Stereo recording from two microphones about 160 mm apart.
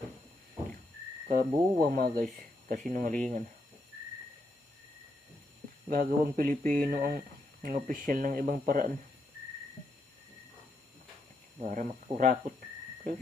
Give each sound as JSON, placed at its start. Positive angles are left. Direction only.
{"t": 1.3, "sound": "speech", "side_deg": -60}
{"t": 5.9, "sound": "speech", "side_deg": -60}
{"t": 11.6, "sound": "speech", "side_deg": -55}